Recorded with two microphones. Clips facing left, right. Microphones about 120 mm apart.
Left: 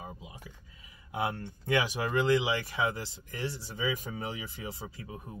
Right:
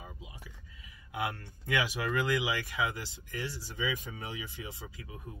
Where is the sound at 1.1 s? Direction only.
25° left (ahead or behind).